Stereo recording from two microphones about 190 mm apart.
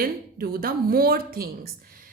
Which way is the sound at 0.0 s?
50° right (ahead or behind).